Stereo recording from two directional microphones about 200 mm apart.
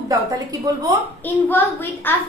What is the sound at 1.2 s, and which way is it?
Speech, 10° left (ahead or behind).